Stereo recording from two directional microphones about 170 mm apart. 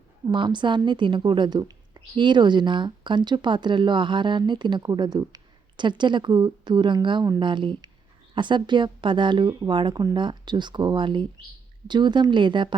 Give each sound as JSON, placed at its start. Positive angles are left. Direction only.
{"t": 0.3, "sound": "a woman's voice", "side_deg": -25}